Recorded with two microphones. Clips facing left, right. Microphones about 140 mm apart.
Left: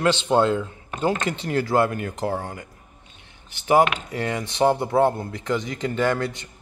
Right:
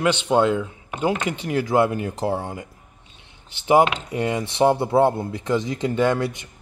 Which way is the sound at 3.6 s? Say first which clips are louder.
Right 1 dB; 20° right (ahead or behind).